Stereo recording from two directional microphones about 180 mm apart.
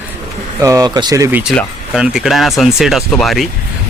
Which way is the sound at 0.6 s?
15° right (ahead or behind).